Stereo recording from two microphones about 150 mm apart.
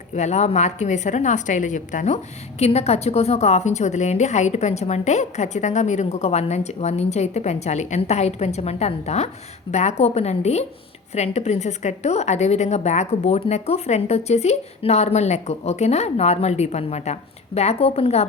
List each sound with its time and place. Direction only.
0.1 s a woman's voice: 50° left (ahead or behind)